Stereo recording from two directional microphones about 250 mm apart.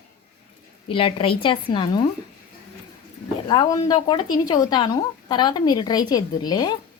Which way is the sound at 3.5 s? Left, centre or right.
Centre.